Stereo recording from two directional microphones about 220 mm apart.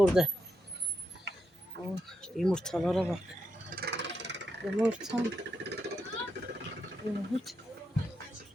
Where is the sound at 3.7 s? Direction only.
50° right (ahead or behind).